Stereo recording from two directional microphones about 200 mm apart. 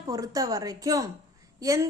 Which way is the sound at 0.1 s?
15° right (ahead or behind).